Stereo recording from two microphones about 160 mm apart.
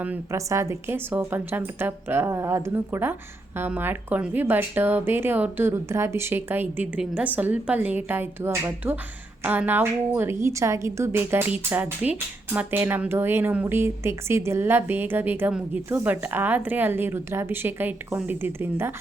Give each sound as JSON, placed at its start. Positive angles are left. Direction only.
{"t": 0.0, "sound": "a woman's voice", "side_deg": -15}